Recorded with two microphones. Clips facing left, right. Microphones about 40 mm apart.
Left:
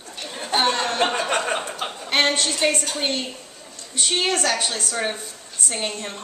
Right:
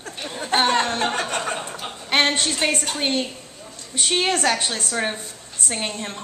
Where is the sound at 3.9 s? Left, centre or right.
Centre.